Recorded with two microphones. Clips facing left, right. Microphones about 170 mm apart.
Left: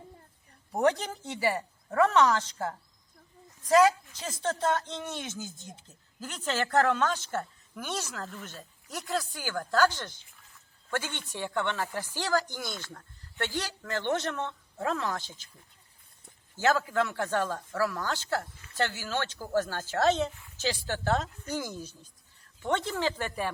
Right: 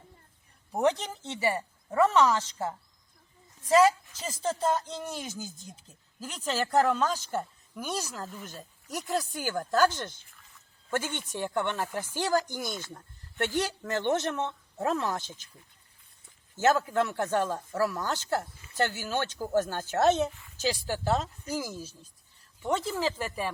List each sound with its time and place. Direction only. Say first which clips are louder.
0.7 s a woman's voice: even; centre (ahead or behind)
3.7 s a woman's voice: even; centre (ahead or behind); by 15.2 s 15° right (ahead or behind)
16.6 s a woman's voice: right 2 dB; 20° right (ahead or behind); by 23.5 s centre (ahead or behind)